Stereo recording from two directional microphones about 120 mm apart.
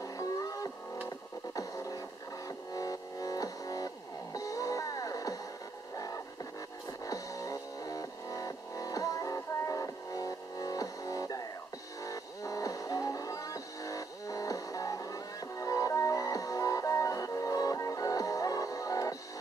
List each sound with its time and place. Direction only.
0.0 s music: 30° left (ahead or behind)
5.9 s a sound: 30° left (ahead or behind)
7.1 s music: 30° left (ahead or behind)